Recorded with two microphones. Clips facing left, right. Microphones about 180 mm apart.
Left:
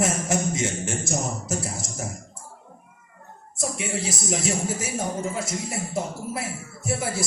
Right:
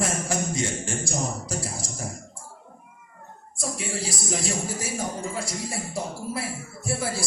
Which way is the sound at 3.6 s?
20° left (ahead or behind).